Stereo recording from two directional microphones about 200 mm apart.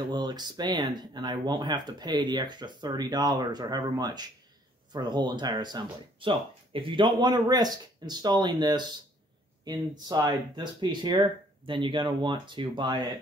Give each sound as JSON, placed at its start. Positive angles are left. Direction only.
{"t": 0.1, "sound": "speech", "side_deg": -20}